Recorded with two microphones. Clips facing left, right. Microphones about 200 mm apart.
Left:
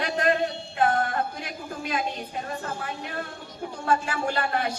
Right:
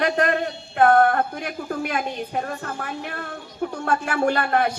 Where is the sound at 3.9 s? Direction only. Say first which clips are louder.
Right 3 dB; 60° right (ahead or behind).